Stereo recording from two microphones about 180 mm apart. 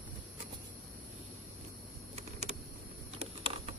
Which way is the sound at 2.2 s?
40° right (ahead or behind).